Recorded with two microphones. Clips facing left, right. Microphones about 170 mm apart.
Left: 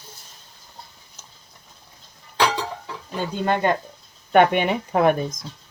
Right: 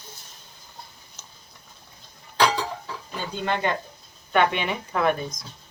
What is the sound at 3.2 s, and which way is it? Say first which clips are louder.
Speech: left 5 dB; 45° left (ahead or behind).